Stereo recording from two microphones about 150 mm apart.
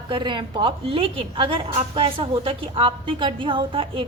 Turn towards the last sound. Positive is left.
turn(degrees=-35)  # may be behind; listen again after turning